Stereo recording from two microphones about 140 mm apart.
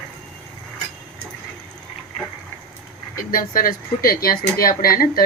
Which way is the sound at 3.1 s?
90° left.